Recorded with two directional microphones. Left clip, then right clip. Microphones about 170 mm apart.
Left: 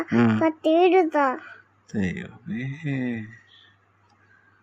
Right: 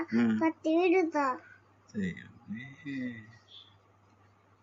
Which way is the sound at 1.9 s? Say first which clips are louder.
Left 9 dB; 65° left (ahead or behind).